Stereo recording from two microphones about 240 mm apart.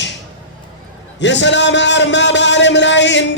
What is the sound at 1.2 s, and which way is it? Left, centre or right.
A man's voice, left.